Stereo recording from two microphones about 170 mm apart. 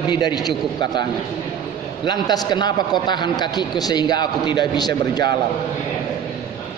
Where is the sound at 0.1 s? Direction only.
25° left (ahead or behind).